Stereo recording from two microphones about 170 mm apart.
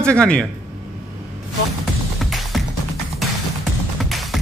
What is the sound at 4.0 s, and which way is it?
Music, centre (ahead or behind).